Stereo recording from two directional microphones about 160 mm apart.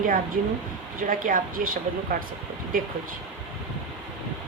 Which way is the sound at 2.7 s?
60° right (ahead or behind).